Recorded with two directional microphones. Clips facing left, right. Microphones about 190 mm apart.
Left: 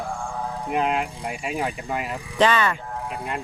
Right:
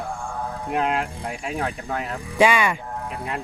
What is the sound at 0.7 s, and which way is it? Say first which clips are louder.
Speech: even; centre (ahead or behind).